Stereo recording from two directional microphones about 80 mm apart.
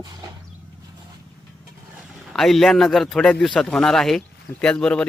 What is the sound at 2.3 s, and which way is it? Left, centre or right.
Speech, centre.